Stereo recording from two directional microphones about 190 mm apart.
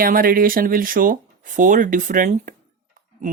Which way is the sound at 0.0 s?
50° right (ahead or behind).